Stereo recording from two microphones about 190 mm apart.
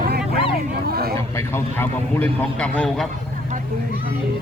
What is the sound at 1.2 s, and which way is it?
A man's voice, 15° left (ahead or behind).